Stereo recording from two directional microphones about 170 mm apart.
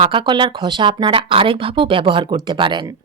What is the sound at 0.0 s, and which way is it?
Speech, 30° right (ahead or behind).